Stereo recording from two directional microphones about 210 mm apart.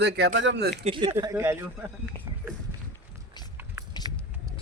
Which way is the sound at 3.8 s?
15° right (ahead or behind).